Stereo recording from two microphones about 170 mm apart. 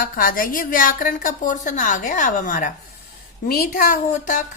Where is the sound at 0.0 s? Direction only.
55° left (ahead or behind).